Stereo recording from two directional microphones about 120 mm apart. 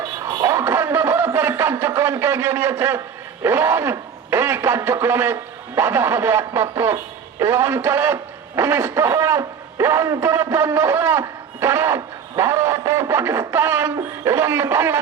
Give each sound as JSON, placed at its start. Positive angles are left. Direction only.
{"t": 0.4, "sound": "music", "side_deg": -20}
{"t": 1.8, "sound": "a man's voice", "side_deg": -20}